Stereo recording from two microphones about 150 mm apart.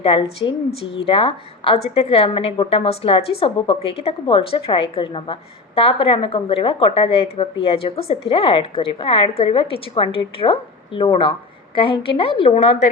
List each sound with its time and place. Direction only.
0.0 s a woman's voice: 40° left (ahead or behind)